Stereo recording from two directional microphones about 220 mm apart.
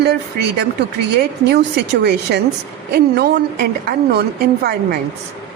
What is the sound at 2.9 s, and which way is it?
A woman's voice, 45° right (ahead or behind).